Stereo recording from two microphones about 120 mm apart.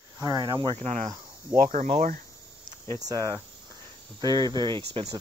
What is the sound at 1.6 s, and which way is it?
Speech, 80° right.